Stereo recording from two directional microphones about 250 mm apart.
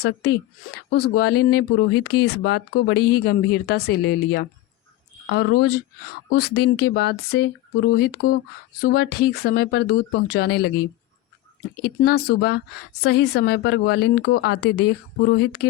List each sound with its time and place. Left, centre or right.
0.0 s speech: left
11.8 s speech: left